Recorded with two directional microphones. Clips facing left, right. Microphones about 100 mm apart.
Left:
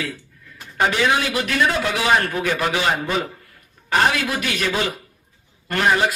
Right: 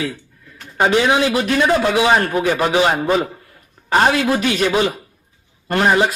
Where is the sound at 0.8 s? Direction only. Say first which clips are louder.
Right 4 dB; 25° right (ahead or behind).